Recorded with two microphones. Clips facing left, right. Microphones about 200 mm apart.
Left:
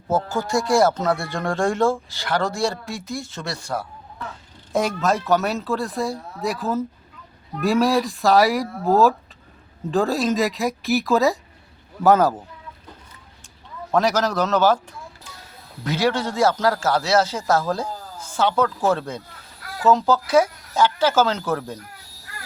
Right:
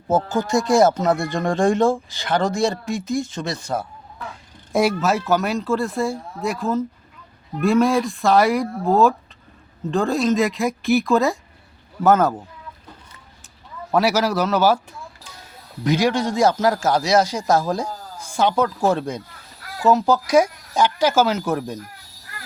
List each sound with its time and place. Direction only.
0.1 s speech: 20° right (ahead or behind)
4.7 s speech: 10° right (ahead or behind)
13.9 s a man's voice: 10° right (ahead or behind)
15.8 s a man's voice: 15° right (ahead or behind)